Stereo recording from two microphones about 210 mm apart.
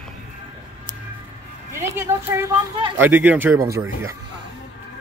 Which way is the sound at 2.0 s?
10° right (ahead or behind).